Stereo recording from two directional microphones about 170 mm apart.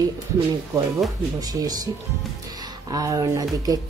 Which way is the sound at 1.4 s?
20° right (ahead or behind).